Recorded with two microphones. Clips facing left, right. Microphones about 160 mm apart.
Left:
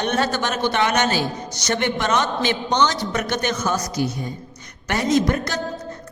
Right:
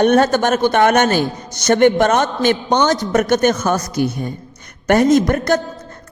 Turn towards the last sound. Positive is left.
turn(degrees=-50)  # may be behind; listen again after turning